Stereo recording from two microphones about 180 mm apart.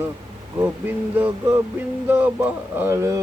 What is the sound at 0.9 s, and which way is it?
Speech, 10° right (ahead or behind).